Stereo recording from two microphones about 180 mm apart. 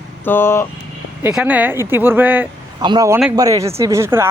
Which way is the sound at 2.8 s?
20° right (ahead or behind).